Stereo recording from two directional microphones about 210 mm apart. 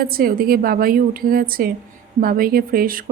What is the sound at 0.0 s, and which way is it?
Speech, 45° right (ahead or behind).